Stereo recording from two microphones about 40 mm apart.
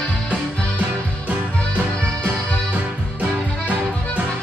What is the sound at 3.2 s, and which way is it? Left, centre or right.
Music, right.